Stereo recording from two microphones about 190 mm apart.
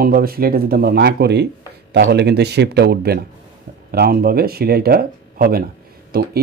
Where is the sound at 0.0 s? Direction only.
50° right (ahead or behind).